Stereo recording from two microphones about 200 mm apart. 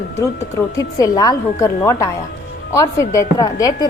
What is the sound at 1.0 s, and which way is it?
A woman's voice, 15° left (ahead or behind).